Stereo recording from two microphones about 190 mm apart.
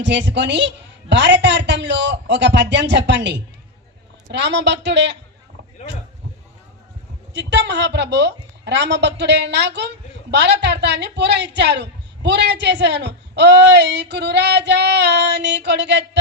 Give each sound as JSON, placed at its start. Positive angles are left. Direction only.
{"t": 0.0, "sound": "a man's voice", "side_deg": -70}
{"t": 7.3, "sound": "a woman's voice", "side_deg": -65}